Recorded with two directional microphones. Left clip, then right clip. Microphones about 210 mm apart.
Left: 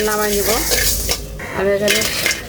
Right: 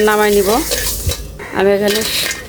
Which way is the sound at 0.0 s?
55° right (ahead or behind).